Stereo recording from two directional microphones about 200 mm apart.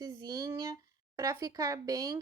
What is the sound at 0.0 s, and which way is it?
Speech, 20° right (ahead or behind).